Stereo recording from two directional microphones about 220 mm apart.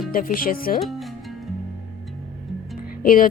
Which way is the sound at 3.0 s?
40° left (ahead or behind).